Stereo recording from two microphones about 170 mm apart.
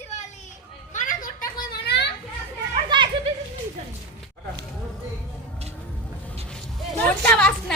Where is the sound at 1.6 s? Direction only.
75° left (ahead or behind).